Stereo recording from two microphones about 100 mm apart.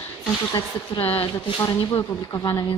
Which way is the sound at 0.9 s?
70° left (ahead or behind).